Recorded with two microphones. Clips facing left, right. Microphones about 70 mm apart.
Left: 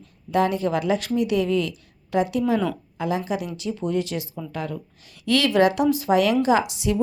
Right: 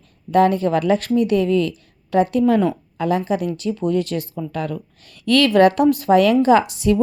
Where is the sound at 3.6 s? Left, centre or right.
Right.